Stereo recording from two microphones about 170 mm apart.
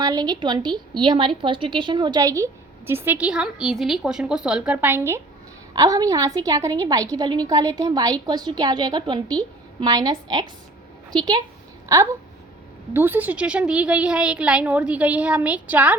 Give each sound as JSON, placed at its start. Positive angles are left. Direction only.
{"t": 0.0, "sound": "a woman's voice", "side_deg": -25}
{"t": 11.9, "sound": "a woman's voice", "side_deg": -20}